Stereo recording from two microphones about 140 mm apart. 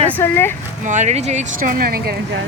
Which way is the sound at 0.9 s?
55° right (ahead or behind).